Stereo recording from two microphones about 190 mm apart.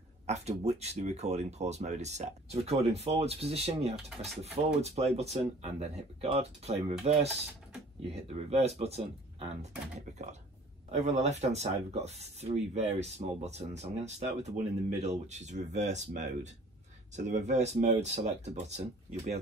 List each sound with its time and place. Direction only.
0.3 s speech: 35° right (ahead or behind)